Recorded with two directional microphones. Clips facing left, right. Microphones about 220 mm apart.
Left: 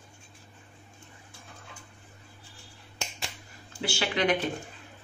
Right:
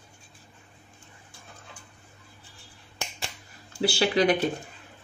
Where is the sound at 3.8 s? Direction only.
35° right (ahead or behind).